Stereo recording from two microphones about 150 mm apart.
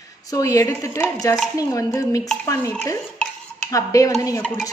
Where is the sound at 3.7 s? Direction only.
20° left (ahead or behind).